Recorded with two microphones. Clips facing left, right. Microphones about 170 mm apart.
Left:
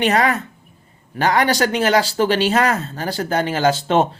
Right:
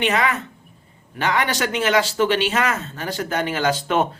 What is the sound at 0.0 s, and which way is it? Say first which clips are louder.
Speech: left 4 dB; 40° left (ahead or behind).